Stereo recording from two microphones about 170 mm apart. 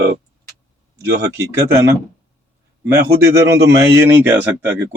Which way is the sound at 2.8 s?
15° right (ahead or behind).